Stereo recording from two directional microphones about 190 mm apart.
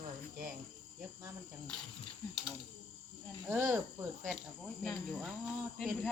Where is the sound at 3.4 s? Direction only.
10° right (ahead or behind).